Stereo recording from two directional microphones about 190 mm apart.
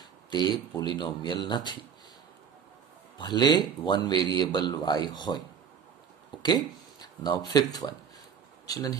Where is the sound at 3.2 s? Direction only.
25° left (ahead or behind).